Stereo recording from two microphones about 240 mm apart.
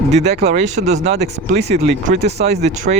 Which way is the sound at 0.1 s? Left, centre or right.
Right.